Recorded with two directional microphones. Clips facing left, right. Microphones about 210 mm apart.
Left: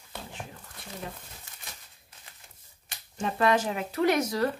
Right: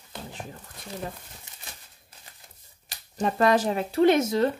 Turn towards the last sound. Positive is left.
turn(degrees=-25)  # may be behind; listen again after turning